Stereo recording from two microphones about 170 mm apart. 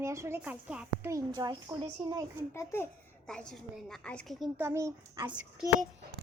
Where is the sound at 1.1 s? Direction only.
25° right (ahead or behind).